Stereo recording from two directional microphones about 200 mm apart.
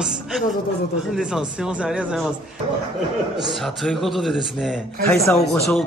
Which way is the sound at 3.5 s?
Centre (ahead or behind).